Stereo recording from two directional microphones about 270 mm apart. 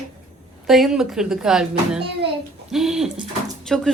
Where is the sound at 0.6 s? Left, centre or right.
Centre.